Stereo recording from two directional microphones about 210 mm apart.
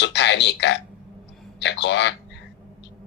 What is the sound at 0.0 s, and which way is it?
Speech, 55° left (ahead or behind).